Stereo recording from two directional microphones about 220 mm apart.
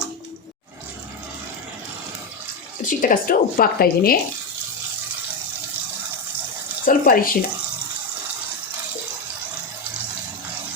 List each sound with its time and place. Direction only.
2.8 s speech: 40° left (ahead or behind)
6.8 s speech: 40° left (ahead or behind)